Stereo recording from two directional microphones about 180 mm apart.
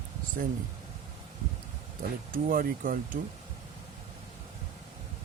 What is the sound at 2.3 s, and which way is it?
Speech, 50° right (ahead or behind).